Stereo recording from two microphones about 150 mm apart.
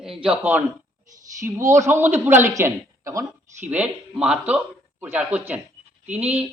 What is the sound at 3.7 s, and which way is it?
Speech, 10° right (ahead or behind).